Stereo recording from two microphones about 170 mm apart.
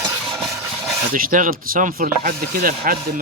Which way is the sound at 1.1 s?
55° right (ahead or behind).